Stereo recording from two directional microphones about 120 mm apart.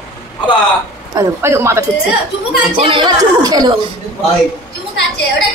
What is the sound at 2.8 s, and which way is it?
Speech, 45° right (ahead or behind).